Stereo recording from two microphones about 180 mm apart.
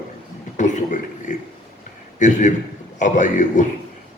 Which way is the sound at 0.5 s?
45° left (ahead or behind).